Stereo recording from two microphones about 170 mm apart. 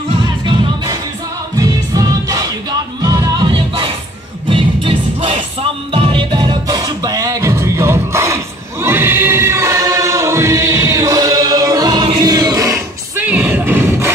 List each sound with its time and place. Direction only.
1.6 s music: 20° right (ahead or behind)
8.8 s choir: 15° right (ahead or behind)